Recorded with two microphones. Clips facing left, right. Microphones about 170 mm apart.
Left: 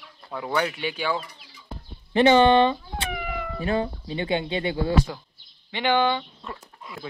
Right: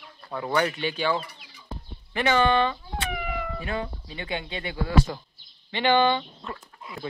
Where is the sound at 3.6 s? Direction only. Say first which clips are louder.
Left 6 dB; 30° left (ahead or behind).